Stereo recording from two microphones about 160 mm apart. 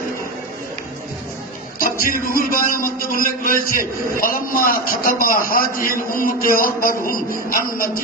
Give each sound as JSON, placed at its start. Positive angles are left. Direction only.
{"t": 1.8, "sound": "a man's voice", "side_deg": 60}